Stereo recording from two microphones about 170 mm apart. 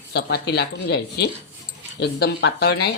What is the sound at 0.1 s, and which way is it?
Speech, 70° left (ahead or behind).